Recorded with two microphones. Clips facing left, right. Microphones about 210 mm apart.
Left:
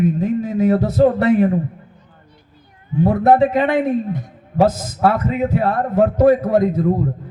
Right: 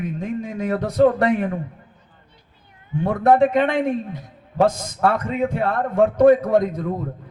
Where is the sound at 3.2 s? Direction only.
5° left (ahead or behind).